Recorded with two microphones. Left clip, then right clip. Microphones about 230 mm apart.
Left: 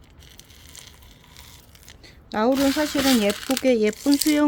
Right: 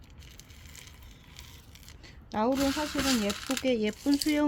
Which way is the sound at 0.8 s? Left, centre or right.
Centre.